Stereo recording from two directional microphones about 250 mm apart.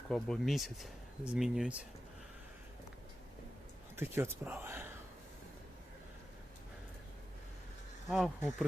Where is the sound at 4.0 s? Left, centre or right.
Centre.